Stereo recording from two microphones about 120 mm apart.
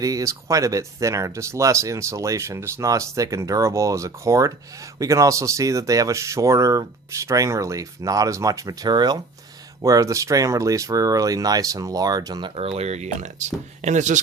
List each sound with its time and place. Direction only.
0.0 s speech: 30° right (ahead or behind)
12.5 s speech: 60° right (ahead or behind); by 14.2 s 90° right